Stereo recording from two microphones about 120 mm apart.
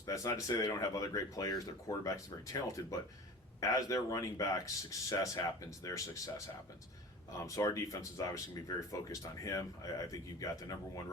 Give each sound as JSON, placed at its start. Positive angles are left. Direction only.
{"t": 0.1, "sound": "speech", "side_deg": 25}